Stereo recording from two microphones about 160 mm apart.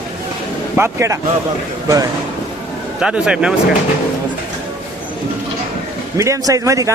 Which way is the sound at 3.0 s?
5° right (ahead or behind).